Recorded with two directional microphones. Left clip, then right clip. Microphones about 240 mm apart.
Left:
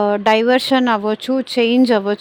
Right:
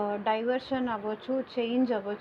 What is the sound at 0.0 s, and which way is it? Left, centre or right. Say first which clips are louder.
Speech: left 14 dB; left.